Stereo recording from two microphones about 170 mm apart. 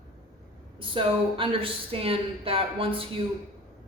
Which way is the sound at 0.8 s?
30° right (ahead or behind).